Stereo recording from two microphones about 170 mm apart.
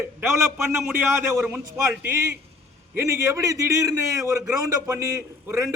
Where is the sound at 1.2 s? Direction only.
10° right (ahead or behind).